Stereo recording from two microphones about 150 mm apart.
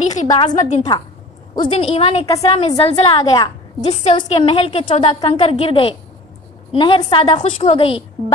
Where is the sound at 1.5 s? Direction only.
35° left (ahead or behind).